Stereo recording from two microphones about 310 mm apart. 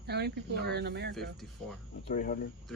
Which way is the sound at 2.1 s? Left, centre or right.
Left.